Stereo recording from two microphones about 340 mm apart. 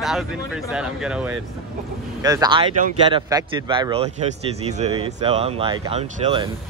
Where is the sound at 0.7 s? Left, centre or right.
Centre.